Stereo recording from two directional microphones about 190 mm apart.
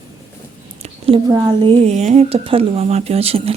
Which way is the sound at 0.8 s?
30° right (ahead or behind).